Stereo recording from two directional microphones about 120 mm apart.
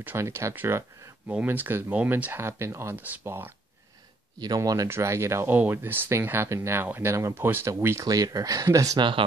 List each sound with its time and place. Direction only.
0.0 s speech: 20° right (ahead or behind)
4.4 s speech: 30° right (ahead or behind)